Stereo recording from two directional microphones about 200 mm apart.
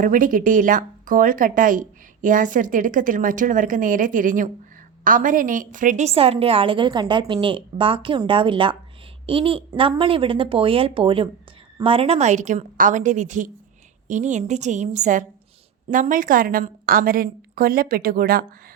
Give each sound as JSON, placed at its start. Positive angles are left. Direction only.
{"t": 0.0, "sound": "a woman's voice", "side_deg": -40}